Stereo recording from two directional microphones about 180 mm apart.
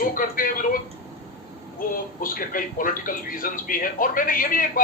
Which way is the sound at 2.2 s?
50° left (ahead or behind).